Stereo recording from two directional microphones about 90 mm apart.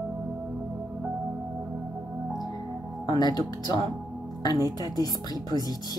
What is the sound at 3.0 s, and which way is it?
Speech, 50° left (ahead or behind).